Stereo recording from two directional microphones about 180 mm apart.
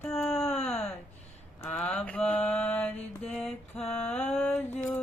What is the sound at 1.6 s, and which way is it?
Mantra, 10° left (ahead or behind).